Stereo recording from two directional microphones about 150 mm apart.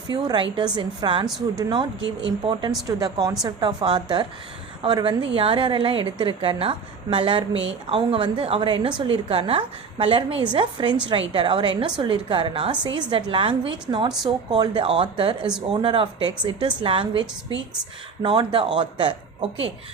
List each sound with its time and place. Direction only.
0.1 s a woman's voice: 30° right (ahead or behind)